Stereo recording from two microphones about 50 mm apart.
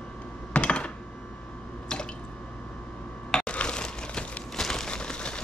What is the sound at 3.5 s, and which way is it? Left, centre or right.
Crumpling, centre.